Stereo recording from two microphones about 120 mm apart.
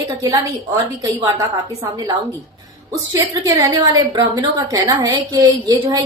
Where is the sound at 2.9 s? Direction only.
30° right (ahead or behind).